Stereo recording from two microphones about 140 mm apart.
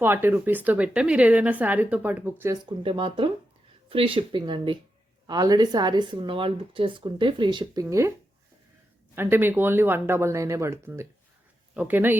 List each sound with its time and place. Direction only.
0.0 s speech: 15° right (ahead or behind)
2.6 s a woman's voice: 35° right (ahead or behind)
9.1 s speech: 15° right (ahead or behind)